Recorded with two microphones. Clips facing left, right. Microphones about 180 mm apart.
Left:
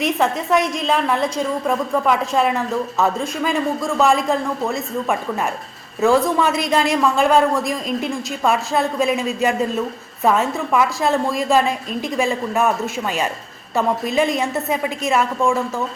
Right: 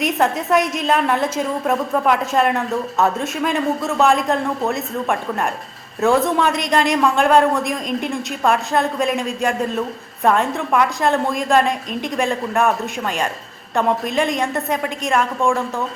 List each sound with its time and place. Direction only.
0.0 s a woman's voice: centre (ahead or behind)